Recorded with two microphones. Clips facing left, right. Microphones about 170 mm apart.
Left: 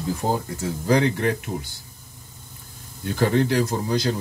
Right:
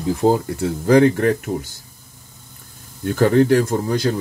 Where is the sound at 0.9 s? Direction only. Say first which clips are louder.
Right 7 dB; 50° right (ahead or behind).